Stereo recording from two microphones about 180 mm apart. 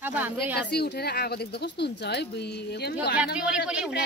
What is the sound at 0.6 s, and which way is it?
Speech, 65° left (ahead or behind).